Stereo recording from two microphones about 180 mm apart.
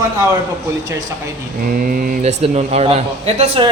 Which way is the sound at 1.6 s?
50° right (ahead or behind).